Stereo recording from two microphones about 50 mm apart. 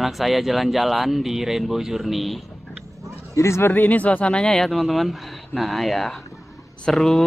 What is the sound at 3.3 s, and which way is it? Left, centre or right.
Speech, left.